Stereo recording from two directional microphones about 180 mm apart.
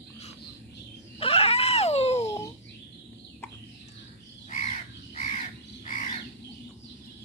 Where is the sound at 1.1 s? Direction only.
35° left (ahead or behind).